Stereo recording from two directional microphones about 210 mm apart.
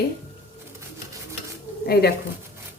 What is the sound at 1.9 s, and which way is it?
Speech, 50° left (ahead or behind).